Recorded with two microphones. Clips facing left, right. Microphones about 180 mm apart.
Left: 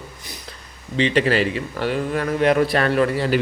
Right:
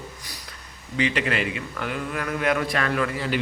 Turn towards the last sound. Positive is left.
turn(degrees=40)  # may be behind; listen again after turning